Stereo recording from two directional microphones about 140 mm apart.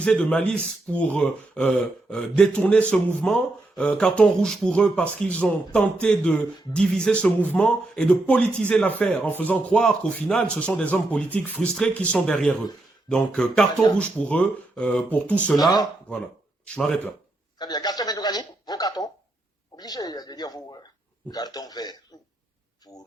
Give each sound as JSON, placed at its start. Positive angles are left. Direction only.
{"t": 0.0, "sound": "speech", "side_deg": 10}
{"t": 16.6, "sound": "speech", "side_deg": 5}
{"t": 17.6, "sound": "speech", "side_deg": 30}